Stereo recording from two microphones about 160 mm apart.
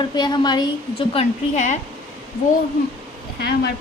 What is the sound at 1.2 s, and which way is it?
Speech, 45° left (ahead or behind).